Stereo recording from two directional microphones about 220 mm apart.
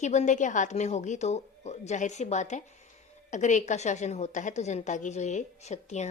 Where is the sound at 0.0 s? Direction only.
30° left (ahead or behind).